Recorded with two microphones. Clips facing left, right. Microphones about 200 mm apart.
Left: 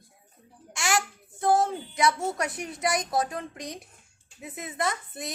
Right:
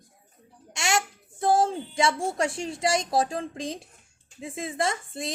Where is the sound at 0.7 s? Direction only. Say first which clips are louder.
Right 1 dB; 25° right (ahead or behind).